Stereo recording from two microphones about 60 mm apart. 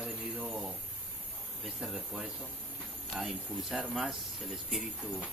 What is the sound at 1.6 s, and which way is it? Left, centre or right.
Speech, centre.